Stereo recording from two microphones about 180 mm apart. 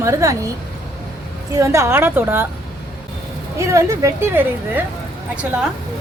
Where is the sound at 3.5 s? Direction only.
15° right (ahead or behind).